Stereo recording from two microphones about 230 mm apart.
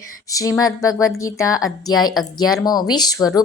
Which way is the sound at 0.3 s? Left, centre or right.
Centre.